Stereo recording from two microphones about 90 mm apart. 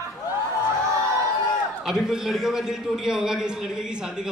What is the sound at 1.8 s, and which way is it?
A man's voice, 5° right (ahead or behind).